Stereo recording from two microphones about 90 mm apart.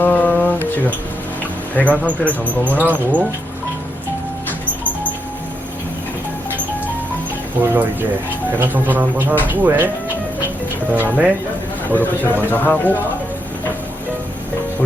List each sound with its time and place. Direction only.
0.0 s a sound: 20° left (ahead or behind)
1.7 s speech: 15° left (ahead or behind)
2.7 s speech: 20° right (ahead or behind)
7.6 s speech: 25° right (ahead or behind)
10.9 s speech: 20° right (ahead or behind)
11.9 s a man's voice: 20° left (ahead or behind)